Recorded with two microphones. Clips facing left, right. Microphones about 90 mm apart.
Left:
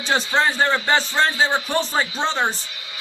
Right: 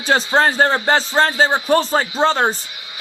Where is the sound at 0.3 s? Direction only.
40° right (ahead or behind).